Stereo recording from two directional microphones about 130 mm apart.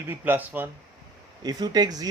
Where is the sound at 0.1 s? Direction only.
15° right (ahead or behind).